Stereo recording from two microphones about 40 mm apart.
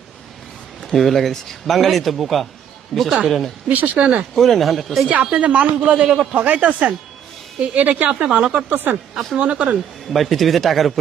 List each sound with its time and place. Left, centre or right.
0.9 s a man's voice: centre
2.9 s a man's voice: centre
3.2 s a man's voice: centre
3.7 s speech: right
4.0 s a woman's voice: right
4.4 s a man's voice: centre
5.0 s a woman's voice: right
6.0 s a man's voice: centre
6.3 s a woman's voice: right
8.7 s speech: right
9.4 s a woman's voice: right
9.7 s a man's voice: centre